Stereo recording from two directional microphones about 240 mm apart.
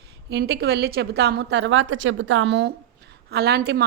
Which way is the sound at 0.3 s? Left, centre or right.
Right.